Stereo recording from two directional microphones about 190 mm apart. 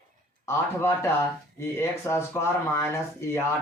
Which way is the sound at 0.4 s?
15° left (ahead or behind).